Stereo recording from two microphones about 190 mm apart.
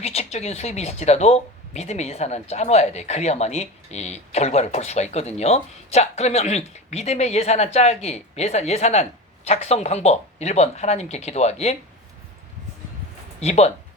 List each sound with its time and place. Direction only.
0.0 s speech: 35° left (ahead or behind)
13.4 s speech: 35° left (ahead or behind)